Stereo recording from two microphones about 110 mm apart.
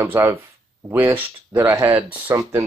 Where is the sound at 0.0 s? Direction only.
25° right (ahead or behind).